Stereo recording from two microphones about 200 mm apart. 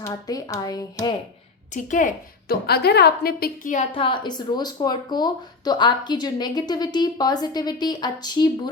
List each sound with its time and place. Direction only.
0.0 s speech: 15° left (ahead or behind)
1.7 s a woman's voice: 40° left (ahead or behind)
3.9 s speech: 25° left (ahead or behind)